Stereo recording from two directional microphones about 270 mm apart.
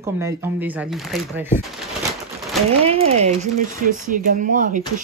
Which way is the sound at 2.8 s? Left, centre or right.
Right.